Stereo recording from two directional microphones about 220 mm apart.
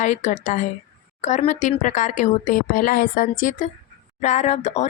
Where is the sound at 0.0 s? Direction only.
30° left (ahead or behind).